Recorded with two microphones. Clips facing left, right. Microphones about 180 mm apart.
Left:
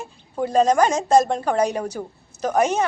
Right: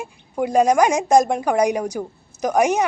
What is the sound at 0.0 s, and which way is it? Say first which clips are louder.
A woman's voice: right 2 dB; 10° right (ahead or behind).